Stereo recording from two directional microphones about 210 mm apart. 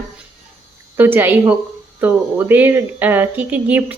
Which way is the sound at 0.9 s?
10° right (ahead or behind).